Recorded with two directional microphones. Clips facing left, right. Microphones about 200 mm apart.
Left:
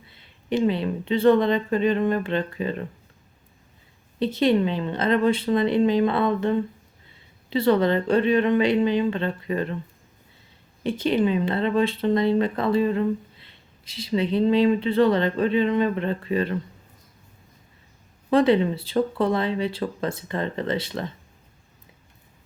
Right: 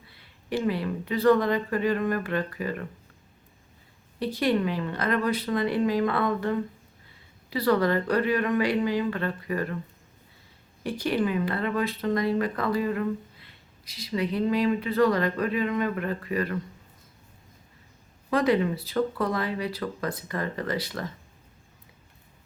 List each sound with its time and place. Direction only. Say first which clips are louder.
0.1 s speech: left 5 dB; 20° left (ahead or behind)
4.2 s speech: left 5 dB; 25° left (ahead or behind)
10.8 s speech: left 5 dB; 20° left (ahead or behind)
18.3 s speech: left 5 dB; 25° left (ahead or behind)